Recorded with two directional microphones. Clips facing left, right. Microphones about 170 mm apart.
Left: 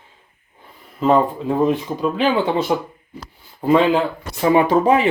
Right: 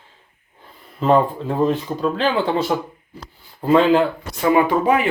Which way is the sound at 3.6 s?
Centre (ahead or behind).